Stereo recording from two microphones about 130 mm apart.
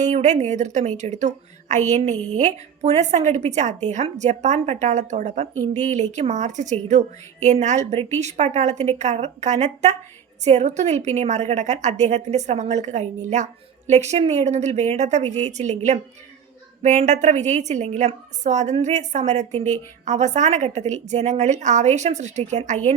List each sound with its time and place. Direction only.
0.0 s a woman's voice: 65° right (ahead or behind)